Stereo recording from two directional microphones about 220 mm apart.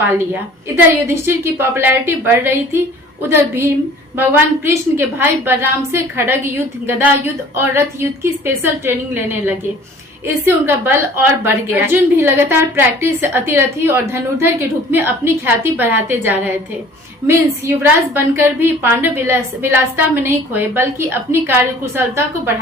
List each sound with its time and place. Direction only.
0.1 s a woman's voice: 10° right (ahead or behind)
17.8 s a woman's voice: 10° right (ahead or behind)